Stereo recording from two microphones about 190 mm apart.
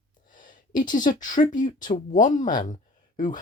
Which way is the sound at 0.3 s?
45° left (ahead or behind).